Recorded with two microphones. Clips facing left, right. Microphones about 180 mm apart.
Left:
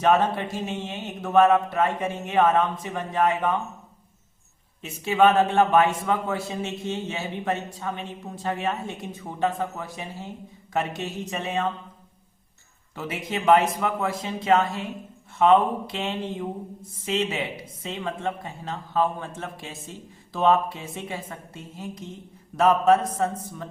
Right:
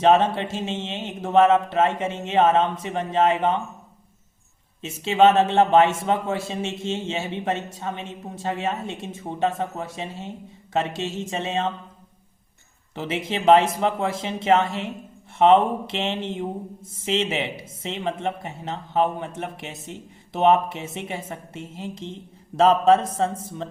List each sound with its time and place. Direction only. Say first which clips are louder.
0.0 s speech: right 3 dB; 25° right (ahead or behind)
4.8 s speech: right 2 dB; 25° right (ahead or behind)
12.9 s speech: right 3 dB; 25° right (ahead or behind)